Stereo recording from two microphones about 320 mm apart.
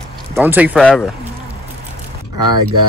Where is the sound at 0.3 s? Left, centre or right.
Centre.